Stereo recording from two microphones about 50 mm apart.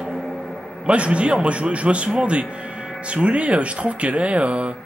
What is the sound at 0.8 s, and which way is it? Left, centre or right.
A man's voice, right.